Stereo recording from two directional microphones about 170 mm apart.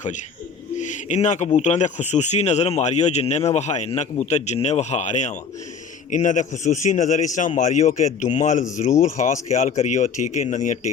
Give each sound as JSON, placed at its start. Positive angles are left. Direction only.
{"t": 0.8, "sound": "bird", "side_deg": 45}
{"t": 1.5, "sound": "speech", "side_deg": 40}